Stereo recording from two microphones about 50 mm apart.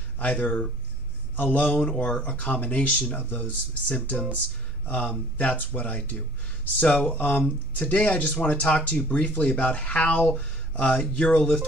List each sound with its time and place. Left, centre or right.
0.2 s speech: left
1.8 s speech: centre
2.2 s speech: left